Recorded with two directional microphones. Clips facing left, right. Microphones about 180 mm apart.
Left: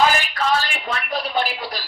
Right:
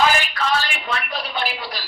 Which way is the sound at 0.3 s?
45° left (ahead or behind).